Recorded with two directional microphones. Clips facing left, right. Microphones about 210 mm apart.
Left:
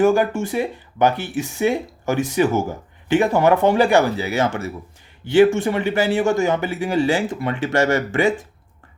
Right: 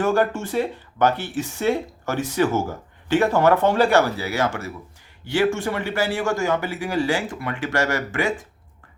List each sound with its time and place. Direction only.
0.0 s speech: 10° left (ahead or behind)